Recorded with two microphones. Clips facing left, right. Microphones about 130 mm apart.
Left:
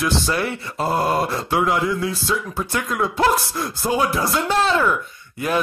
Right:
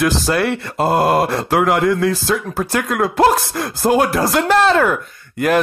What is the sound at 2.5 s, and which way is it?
Speech, 85° right.